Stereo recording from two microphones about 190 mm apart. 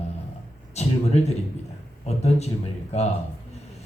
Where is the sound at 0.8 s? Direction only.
35° left (ahead or behind).